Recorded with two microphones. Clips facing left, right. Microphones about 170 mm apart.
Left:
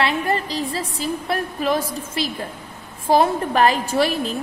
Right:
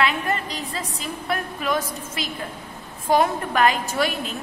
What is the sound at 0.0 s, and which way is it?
A woman's voice, 35° left (ahead or behind).